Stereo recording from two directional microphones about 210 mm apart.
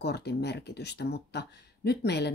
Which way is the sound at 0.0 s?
50° left (ahead or behind).